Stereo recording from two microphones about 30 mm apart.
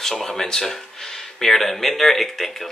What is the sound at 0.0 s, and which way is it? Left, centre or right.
Speech, centre.